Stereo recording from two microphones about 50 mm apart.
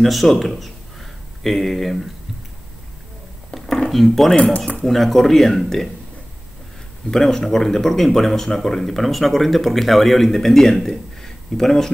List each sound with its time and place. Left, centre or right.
0.0 s speech: centre
3.5 s dishes: centre
4.0 s speech: centre
4.5 s speech: left
4.8 s speech: centre
7.1 s speech: centre